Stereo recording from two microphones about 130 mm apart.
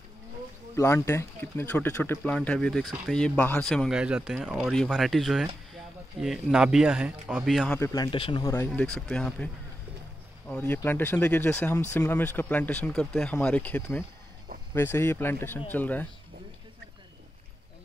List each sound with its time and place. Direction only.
0.7 s speech: 20° left (ahead or behind)
3.9 s speech: 5° right (ahead or behind)
6.5 s speech: 5° right (ahead or behind)
7.4 s speech: 5° left (ahead or behind)
7.8 s speech: 30° left (ahead or behind)
8.5 s speech: 10° left (ahead or behind)
10.5 s speech: 15° left (ahead or behind)